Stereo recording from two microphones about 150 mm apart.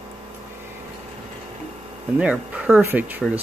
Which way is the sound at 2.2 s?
10° right (ahead or behind).